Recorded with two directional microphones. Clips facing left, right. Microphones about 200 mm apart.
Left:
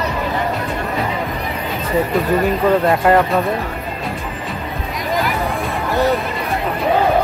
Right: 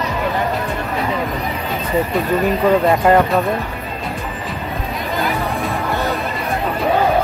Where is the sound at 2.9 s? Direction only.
Centre (ahead or behind).